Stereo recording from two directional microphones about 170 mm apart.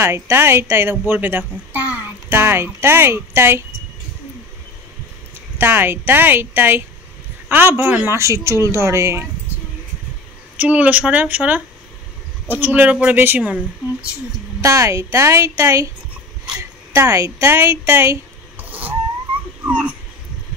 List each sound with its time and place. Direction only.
0.0 s a woman's voice: 15° right (ahead or behind)
5.6 s a woman's voice: 10° right (ahead or behind)
10.6 s a woman's voice: 10° right (ahead or behind)
14.6 s a woman's voice: 20° right (ahead or behind)
16.9 s a woman's voice: 20° right (ahead or behind)
18.6 s vehicle: 10° right (ahead or behind)
19.6 s dog: 10° right (ahead or behind)